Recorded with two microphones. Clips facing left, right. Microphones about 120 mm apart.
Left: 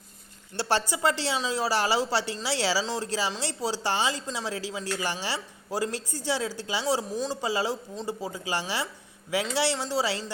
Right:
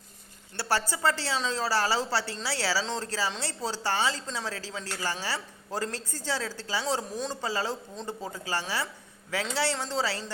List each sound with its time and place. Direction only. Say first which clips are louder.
0.5 s a woman's voice: left 2 dB; 20° left (ahead or behind)
2.8 s a woman's voice: left 2 dB; 5° left (ahead or behind)
7.4 s a woman's voice: left 2 dB; 15° left (ahead or behind)